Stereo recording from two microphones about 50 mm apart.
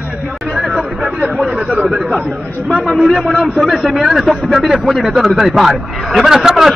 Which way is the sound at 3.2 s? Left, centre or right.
Centre.